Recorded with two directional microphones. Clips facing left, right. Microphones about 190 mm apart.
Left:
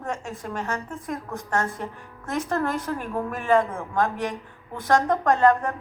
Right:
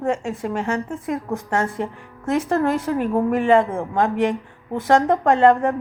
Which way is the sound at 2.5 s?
25° right (ahead or behind).